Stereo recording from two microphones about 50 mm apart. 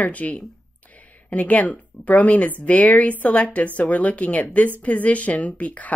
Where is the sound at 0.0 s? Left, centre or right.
Left.